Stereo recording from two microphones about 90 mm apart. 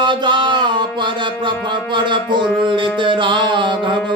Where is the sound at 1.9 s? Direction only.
60° right (ahead or behind).